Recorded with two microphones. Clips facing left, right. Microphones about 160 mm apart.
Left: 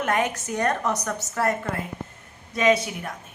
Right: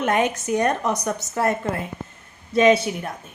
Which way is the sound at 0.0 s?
20° right (ahead or behind).